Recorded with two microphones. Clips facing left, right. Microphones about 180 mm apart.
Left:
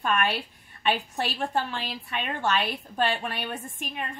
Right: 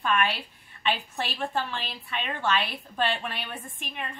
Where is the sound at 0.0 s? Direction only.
45° left (ahead or behind).